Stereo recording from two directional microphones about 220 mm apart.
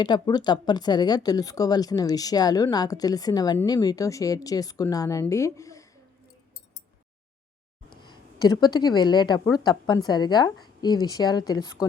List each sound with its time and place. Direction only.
0.0 s speech: 20° left (ahead or behind)
7.9 s speech: 20° left (ahead or behind)